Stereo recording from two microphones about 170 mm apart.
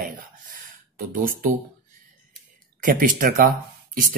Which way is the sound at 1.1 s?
55° right (ahead or behind).